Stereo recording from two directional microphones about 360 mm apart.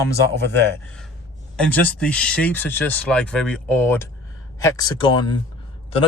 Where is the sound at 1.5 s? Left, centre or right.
Centre.